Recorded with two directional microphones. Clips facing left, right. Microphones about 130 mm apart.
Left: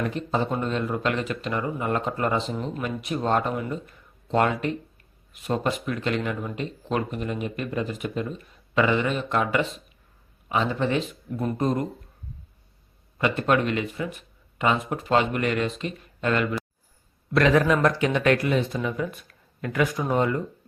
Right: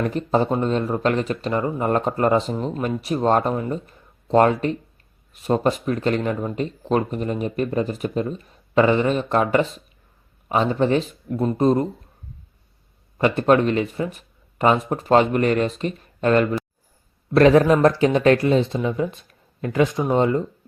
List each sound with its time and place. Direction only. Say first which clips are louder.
0.0 s speech: right 5 dB; 40° right (ahead or behind)
13.1 s speech: right 6 dB; 35° right (ahead or behind)